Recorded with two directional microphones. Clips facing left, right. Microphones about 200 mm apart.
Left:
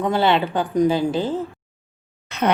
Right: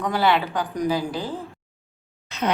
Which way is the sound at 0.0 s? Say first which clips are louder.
Left 3 dB; 25° left (ahead or behind).